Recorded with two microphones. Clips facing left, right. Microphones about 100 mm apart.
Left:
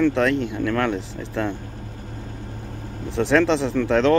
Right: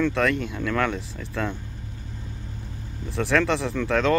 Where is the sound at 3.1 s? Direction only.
20° left (ahead or behind).